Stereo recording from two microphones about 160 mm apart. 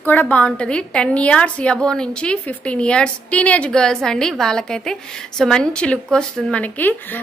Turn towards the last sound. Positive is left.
turn(degrees=10)  # may be behind; listen again after turning